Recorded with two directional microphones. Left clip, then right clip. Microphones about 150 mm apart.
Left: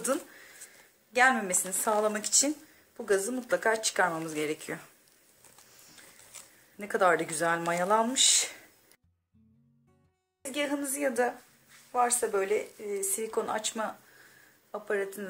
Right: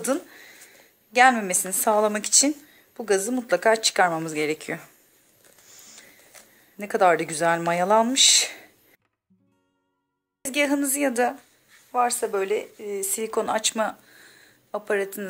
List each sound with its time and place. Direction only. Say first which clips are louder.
0.0 s a sound: right 5 dB; 40° right (ahead or behind)
1.1 s speech: right 7 dB; 45° right (ahead or behind)
6.8 s speech: right 6 dB; 40° right (ahead or behind)
10.4 s a woman's voice: right 9 dB; 60° right (ahead or behind)
11.9 s a woman's voice: right 4 dB; 35° right (ahead or behind); by 15.2 s 60° right (ahead or behind)